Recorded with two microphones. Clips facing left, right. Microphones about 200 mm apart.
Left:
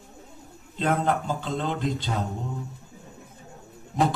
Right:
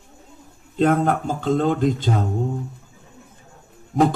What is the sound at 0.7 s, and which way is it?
Speech, 50° right (ahead or behind).